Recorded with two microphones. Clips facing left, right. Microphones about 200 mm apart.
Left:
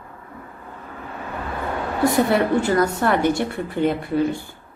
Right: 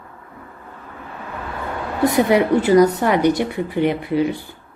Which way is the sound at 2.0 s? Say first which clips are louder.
Right 3 dB; 20° right (ahead or behind).